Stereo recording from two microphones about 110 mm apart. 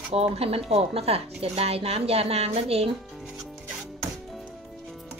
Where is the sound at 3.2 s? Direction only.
Centre (ahead or behind).